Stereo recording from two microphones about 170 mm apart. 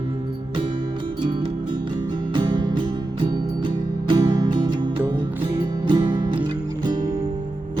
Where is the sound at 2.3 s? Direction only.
30° right (ahead or behind).